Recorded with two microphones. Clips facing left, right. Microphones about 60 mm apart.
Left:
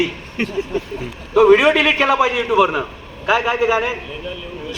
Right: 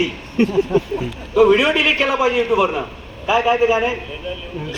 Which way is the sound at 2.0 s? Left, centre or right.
Left.